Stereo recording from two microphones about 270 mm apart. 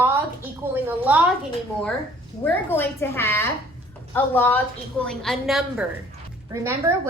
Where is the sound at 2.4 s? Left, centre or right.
Centre.